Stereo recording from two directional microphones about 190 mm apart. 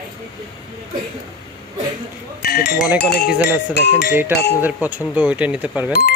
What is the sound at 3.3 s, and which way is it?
Speech, 5° right (ahead or behind).